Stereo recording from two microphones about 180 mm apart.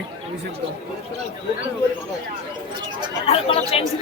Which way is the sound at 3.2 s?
35° left (ahead or behind).